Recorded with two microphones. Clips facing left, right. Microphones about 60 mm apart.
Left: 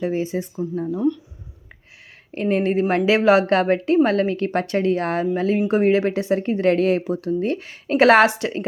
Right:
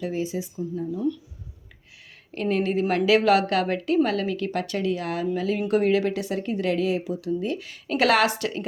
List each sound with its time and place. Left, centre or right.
0.0 s a woman's voice: left
0.4 s speech: left
2.3 s a woman's voice: left